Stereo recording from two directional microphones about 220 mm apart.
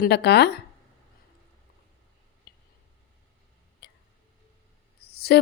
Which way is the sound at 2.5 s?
45° left (ahead or behind).